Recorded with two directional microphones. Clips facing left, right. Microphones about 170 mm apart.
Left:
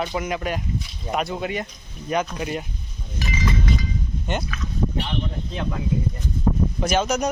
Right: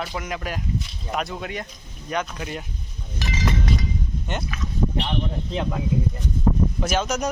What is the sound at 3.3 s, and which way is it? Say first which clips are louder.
Goat: even; 70° right (ahead or behind).